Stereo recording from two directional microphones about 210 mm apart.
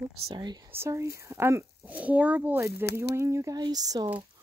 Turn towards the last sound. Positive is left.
turn(degrees=-20)  # may be behind; listen again after turning